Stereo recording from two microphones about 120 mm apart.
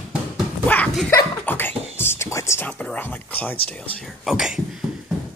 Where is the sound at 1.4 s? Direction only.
15° left (ahead or behind).